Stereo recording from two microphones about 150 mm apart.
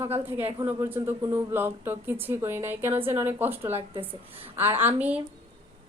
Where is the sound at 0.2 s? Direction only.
15° right (ahead or behind).